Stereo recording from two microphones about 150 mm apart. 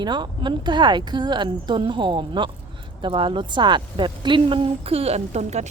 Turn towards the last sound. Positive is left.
turn(degrees=-45)  # may be behind; listen again after turning